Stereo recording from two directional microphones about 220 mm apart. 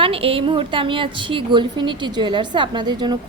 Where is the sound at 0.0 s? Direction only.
25° right (ahead or behind).